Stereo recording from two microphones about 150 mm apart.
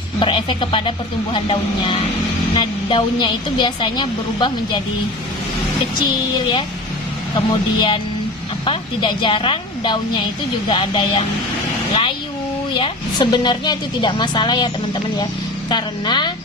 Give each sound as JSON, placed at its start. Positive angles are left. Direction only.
{"t": 0.2, "sound": "a woman's voice", "side_deg": 35}
{"t": 7.3, "sound": "a woman's voice", "side_deg": 35}
{"t": 12.7, "sound": "a woman's voice", "side_deg": 35}
{"t": 15.7, "sound": "a woman's voice", "side_deg": 30}